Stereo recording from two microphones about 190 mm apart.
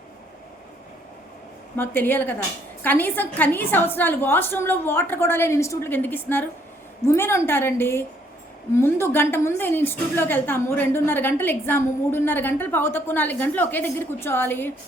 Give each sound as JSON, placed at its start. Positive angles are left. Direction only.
{"t": 1.7, "sound": "a woman's voice", "side_deg": 10}